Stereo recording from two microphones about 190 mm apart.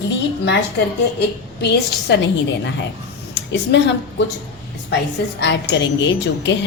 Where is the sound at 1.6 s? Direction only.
65° left (ahead or behind).